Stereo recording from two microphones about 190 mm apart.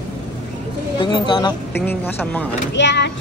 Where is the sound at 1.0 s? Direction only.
25° left (ahead or behind).